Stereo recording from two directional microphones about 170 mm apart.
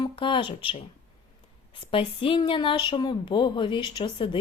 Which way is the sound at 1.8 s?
30° left (ahead or behind).